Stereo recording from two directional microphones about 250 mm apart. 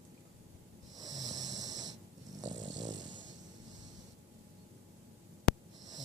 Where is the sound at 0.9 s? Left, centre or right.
Centre.